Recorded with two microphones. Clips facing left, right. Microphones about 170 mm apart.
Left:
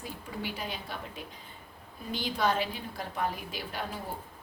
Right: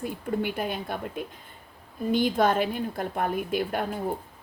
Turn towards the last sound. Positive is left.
turn(degrees=-55)  # may be behind; listen again after turning